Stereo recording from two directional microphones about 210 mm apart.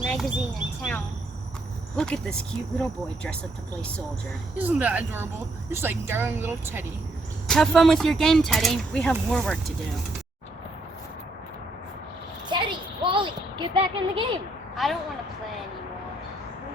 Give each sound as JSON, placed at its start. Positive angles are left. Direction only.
{"t": 0.0, "sound": "a sound", "side_deg": 0}
{"t": 2.0, "sound": "speech", "side_deg": 5}
{"t": 4.5, "sound": "speech", "side_deg": -5}
{"t": 7.4, "sound": "speech", "side_deg": 0}
{"t": 12.5, "sound": "a sound", "side_deg": -20}
{"t": 14.8, "sound": "speech", "side_deg": 0}